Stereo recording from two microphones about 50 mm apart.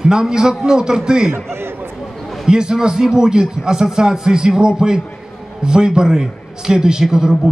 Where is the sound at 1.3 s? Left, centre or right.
Right.